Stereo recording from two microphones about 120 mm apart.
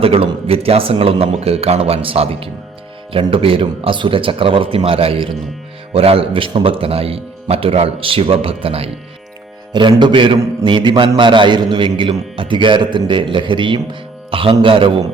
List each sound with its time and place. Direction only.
0.0 s a man's voice: 50° right (ahead or behind)
9.7 s a man's voice: 40° right (ahead or behind)